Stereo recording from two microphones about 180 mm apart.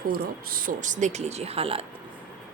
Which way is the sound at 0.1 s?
55° right (ahead or behind).